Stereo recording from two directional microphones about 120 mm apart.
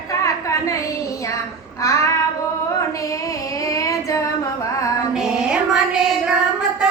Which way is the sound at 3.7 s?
25° left (ahead or behind).